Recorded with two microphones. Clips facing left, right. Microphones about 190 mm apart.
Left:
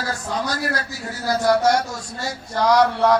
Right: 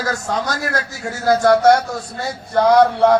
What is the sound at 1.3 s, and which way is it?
Speech, 55° right (ahead or behind).